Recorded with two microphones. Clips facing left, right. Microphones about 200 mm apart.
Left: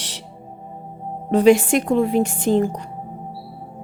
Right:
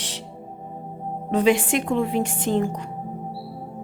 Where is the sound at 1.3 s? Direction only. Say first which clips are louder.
Left 6 dB; 40° left (ahead or behind).